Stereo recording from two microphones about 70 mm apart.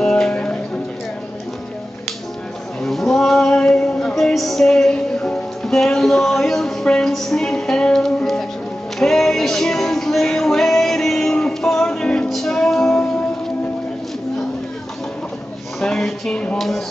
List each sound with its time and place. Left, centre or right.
0.0 s music: centre
0.3 s music: centre
2.8 s a sound: centre
9.0 s music: centre
15.8 s music: centre
16.5 s speech: centre